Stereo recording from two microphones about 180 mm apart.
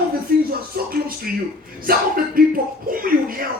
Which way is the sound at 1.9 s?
55° right (ahead or behind).